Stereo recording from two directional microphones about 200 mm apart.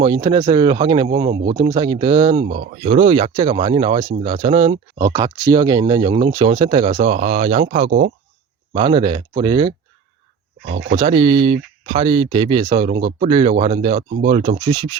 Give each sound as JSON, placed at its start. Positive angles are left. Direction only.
{"t": 0.0, "sound": "speech", "side_deg": -20}
{"t": 1.4, "sound": "speech", "side_deg": -45}
{"t": 1.6, "sound": "speech", "side_deg": -20}
{"t": 7.9, "sound": "speech", "side_deg": -50}
{"t": 8.7, "sound": "speech", "side_deg": -25}
{"t": 10.7, "sound": "speech", "side_deg": -60}
{"t": 10.9, "sound": "speech", "side_deg": -25}